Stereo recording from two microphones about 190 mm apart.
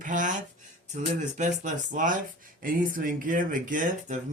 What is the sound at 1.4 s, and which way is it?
Speech, 40° right (ahead or behind).